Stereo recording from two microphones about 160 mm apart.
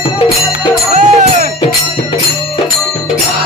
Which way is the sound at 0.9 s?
45° right (ahead or behind).